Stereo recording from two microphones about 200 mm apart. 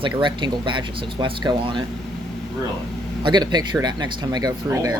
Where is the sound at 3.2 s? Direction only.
20° right (ahead or behind).